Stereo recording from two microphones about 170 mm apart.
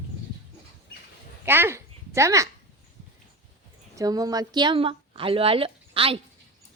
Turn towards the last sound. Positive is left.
turn(degrees=-35)  # may be behind; listen again after turning